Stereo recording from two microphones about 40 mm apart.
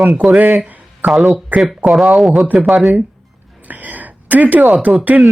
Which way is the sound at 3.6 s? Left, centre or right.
Right.